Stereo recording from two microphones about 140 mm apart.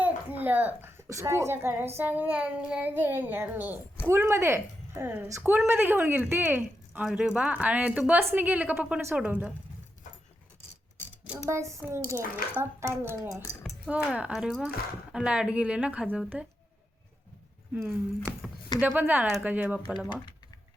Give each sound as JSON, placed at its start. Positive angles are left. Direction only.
{"t": 0.0, "sound": "a woman's voice", "side_deg": -15}
{"t": 11.4, "sound": "a child's voice", "side_deg": -20}
{"t": 17.8, "sound": "speech", "side_deg": -5}